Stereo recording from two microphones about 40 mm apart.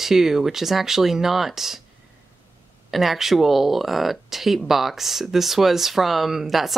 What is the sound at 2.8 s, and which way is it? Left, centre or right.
Speech, centre.